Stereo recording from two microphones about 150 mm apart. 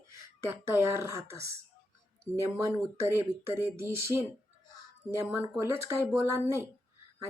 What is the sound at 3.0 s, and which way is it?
Speech, 15° right (ahead or behind).